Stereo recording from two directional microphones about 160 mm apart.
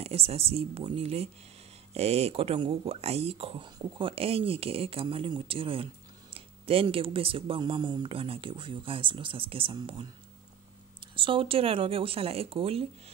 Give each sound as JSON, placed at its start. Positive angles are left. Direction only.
{"t": 0.0, "sound": "speech", "side_deg": -40}